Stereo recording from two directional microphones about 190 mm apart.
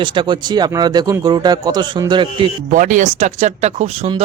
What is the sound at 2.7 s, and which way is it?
Speech, 40° right (ahead or behind).